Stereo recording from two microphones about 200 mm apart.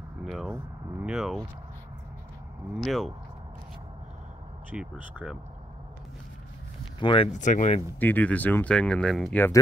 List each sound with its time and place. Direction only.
0.2 s speech: centre (ahead or behind)
2.8 s speech: centre (ahead or behind)
4.6 s speech: 10° right (ahead or behind)
7.0 s speech: 25° left (ahead or behind)
7.3 s speech: 40° left (ahead or behind)
8.0 s speech: 10° left (ahead or behind)